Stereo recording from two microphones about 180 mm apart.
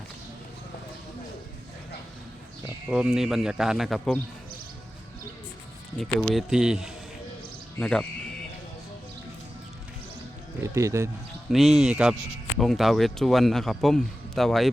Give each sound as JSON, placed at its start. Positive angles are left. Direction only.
{"t": 2.9, "sound": "speech", "side_deg": -5}
{"t": 6.0, "sound": "speech", "side_deg": 5}
{"t": 10.6, "sound": "speech", "side_deg": -15}
{"t": 11.4, "sound": "speech", "side_deg": 0}